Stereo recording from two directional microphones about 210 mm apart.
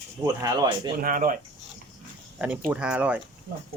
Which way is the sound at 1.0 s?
40° right (ahead or behind).